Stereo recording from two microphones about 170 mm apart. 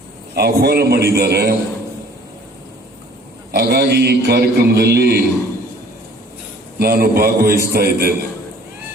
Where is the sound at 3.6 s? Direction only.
70° right (ahead or behind).